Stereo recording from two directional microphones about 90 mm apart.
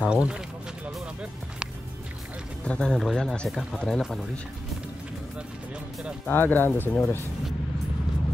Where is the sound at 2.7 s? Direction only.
10° left (ahead or behind).